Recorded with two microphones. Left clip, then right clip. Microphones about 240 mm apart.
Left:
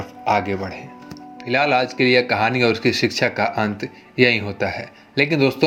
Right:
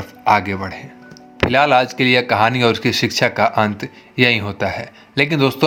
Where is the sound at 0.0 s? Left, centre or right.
Right.